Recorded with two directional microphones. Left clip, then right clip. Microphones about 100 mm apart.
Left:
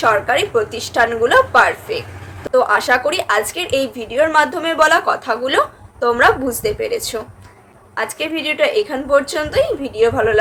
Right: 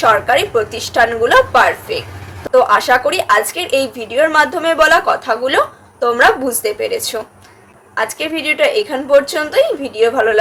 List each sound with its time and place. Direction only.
0.0 s a woman's voice: 10° left (ahead or behind)